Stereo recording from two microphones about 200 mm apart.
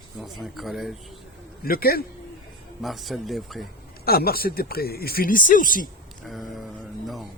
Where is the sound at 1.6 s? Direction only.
50° left (ahead or behind).